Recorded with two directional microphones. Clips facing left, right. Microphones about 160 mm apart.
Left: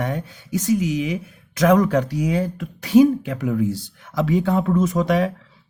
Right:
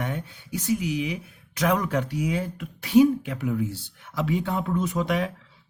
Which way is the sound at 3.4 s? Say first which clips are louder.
Left 5 dB; 90° left.